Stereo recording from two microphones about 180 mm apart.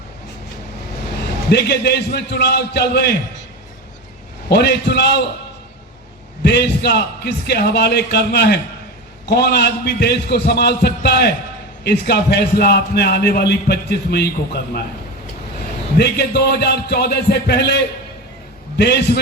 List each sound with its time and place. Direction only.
1.5 s a man's voice: 65° left (ahead or behind)
4.4 s a man's voice: 65° left (ahead or behind)
6.4 s a man's voice: 70° left (ahead or behind)
16.0 s a man's voice: 65° left (ahead or behind)
18.8 s a man's voice: 65° left (ahead or behind)